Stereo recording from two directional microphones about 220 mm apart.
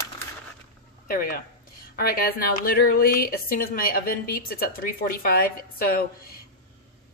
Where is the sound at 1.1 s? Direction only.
40° left (ahead or behind).